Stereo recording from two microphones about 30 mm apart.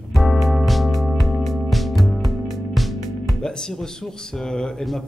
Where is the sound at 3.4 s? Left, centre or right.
Centre.